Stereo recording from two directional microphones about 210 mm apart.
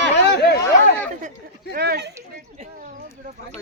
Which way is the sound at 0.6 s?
5° left (ahead or behind).